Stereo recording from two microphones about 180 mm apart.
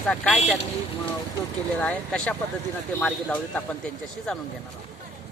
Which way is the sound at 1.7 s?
5° left (ahead or behind).